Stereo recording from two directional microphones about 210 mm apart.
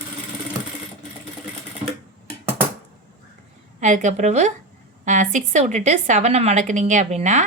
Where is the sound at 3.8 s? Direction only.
35° right (ahead or behind).